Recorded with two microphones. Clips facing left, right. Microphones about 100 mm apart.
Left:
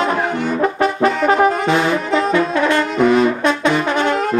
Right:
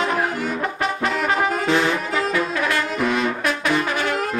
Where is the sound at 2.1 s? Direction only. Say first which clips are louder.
Left 6 dB; 25° left (ahead or behind).